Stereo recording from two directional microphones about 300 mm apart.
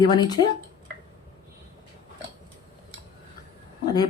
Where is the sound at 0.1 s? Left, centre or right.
Centre.